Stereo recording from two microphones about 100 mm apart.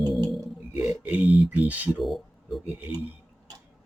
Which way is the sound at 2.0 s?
Centre (ahead or behind).